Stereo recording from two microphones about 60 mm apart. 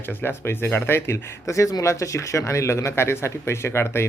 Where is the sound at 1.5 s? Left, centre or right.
Left.